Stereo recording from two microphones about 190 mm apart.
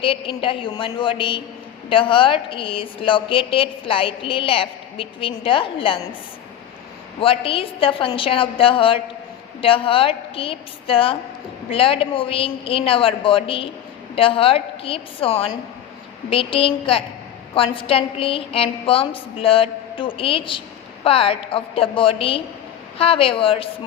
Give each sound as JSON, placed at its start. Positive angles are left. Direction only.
{"t": 0.0, "sound": "a woman's voice", "side_deg": 30}
{"t": 7.2, "sound": "a woman's voice", "side_deg": 30}